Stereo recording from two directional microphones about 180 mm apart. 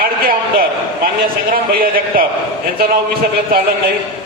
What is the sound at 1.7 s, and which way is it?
Speech, 55° right (ahead or behind).